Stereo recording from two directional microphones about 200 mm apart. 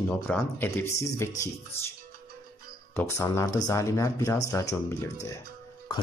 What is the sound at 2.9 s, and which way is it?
A man's voice, 15° left (ahead or behind).